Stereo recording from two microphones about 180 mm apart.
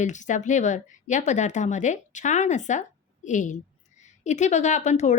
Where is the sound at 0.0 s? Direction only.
45° left (ahead or behind).